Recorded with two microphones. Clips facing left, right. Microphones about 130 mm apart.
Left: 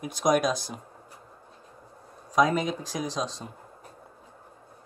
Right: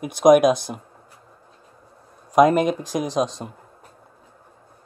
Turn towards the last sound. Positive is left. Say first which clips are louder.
# right 8 dB
turn(degrees=-55)  # may be behind; listen again after turning